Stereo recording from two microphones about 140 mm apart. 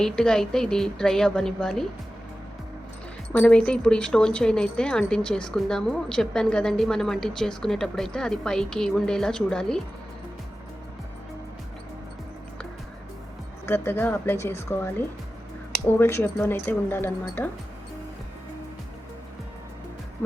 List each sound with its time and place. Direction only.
0.0 s a woman's voice: 5° left (ahead or behind)
3.3 s a woman's voice: 10° left (ahead or behind)
13.7 s speech: 15° left (ahead or behind)